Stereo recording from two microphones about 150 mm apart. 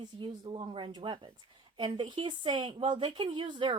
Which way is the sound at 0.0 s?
30° right (ahead or behind).